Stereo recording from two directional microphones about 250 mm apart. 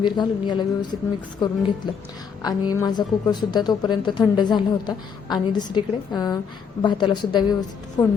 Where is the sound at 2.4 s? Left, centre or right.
Centre.